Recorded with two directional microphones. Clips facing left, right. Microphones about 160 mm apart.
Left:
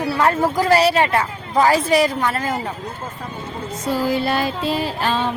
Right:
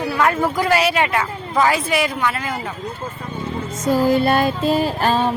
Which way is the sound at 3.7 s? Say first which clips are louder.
Right 4 dB; 45° right (ahead or behind).